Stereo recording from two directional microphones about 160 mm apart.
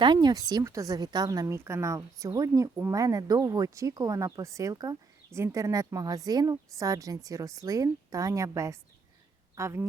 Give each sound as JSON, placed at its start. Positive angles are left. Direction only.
{"t": 0.0, "sound": "speech", "side_deg": -30}